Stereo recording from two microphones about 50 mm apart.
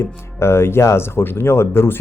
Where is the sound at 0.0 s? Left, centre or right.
Left.